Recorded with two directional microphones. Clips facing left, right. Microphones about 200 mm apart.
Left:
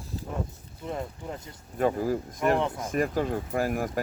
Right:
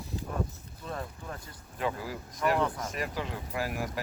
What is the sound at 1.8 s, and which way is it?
Speech, 45° left (ahead or behind).